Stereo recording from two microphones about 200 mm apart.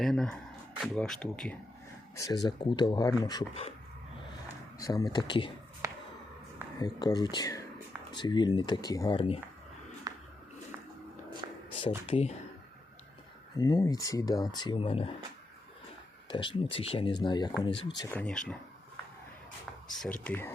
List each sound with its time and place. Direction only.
0.0 s speech: 5° left (ahead or behind)
2.1 s speech: 20° left (ahead or behind)
4.8 s speech: 20° left (ahead or behind)
6.7 s speech: 20° left (ahead or behind)
10.1 s a sound: 20° right (ahead or behind)
11.4 s a sound: 20° right (ahead or behind)
11.8 s speech: 25° left (ahead or behind)
13.6 s speech: 15° left (ahead or behind)
16.3 s speech: 25° left (ahead or behind)
18.2 s speech: 5° left (ahead or behind)
19.9 s speech: centre (ahead or behind)